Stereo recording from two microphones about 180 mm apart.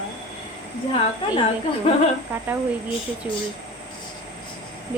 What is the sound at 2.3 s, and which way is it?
Speech, 10° right (ahead or behind).